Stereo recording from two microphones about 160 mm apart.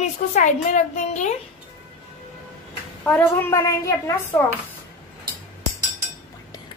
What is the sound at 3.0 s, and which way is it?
A woman's voice, 10° left (ahead or behind).